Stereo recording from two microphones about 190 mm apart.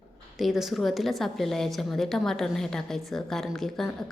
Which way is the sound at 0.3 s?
Centre (ahead or behind).